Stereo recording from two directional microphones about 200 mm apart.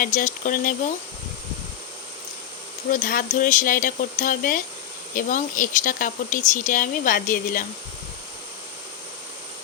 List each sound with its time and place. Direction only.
0.0 s speech: 40° left (ahead or behind)
2.9 s speech: 45° left (ahead or behind)